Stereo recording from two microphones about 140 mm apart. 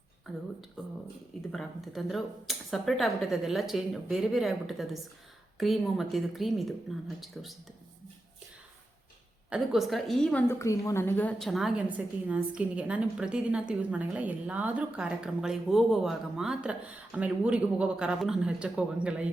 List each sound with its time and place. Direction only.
0.3 s speech: centre (ahead or behind)
1.5 s speech: centre (ahead or behind)
9.5 s speech: centre (ahead or behind)
10.5 s speech: 20° left (ahead or behind)
11.3 s a woman's voice: centre (ahead or behind)